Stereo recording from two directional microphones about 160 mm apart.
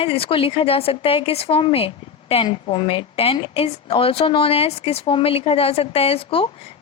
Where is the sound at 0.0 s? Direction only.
35° left (ahead or behind).